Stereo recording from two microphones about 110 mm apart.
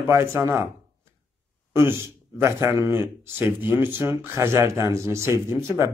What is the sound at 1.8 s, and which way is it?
Speech, 20° right (ahead or behind).